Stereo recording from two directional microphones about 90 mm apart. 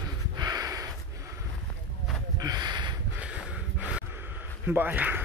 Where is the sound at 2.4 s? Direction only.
50° right (ahead or behind).